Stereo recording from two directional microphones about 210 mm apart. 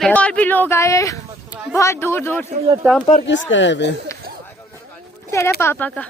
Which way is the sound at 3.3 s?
60° left (ahead or behind).